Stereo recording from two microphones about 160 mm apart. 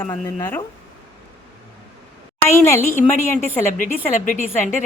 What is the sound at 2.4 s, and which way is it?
Speech, 15° left (ahead or behind).